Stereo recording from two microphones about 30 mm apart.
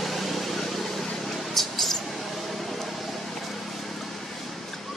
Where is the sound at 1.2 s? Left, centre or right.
Centre.